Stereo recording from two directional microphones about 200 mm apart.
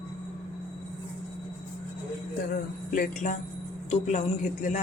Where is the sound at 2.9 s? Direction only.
45° left (ahead or behind).